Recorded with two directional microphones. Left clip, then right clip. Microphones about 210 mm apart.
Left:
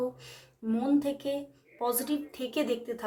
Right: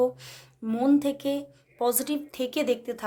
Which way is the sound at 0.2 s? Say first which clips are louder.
Right 3 dB; 45° right (ahead or behind).